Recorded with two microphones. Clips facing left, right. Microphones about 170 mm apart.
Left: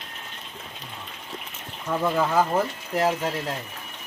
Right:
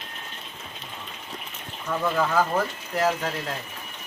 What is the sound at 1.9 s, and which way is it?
Speech, 15° left (ahead or behind).